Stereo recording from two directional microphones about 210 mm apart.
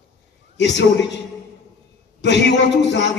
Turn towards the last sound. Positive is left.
turn(degrees=55)  # may be behind; listen again after turning